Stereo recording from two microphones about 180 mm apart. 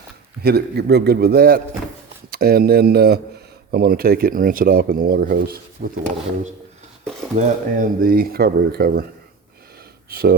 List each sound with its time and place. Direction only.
0.4 s speech: 65° right (ahead or behind)
7.3 s speech: 50° right (ahead or behind)
10.1 s speech: 55° right (ahead or behind)